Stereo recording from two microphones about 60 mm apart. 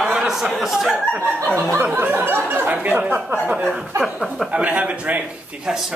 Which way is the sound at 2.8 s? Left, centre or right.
Right.